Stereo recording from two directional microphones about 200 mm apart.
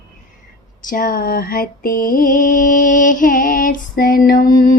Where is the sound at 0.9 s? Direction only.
45° left (ahead or behind).